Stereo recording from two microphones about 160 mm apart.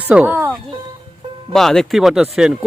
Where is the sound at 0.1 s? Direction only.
10° right (ahead or behind).